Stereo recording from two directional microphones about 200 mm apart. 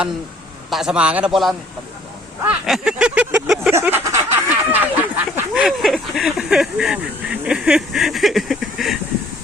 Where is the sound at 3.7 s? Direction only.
10° right (ahead or behind).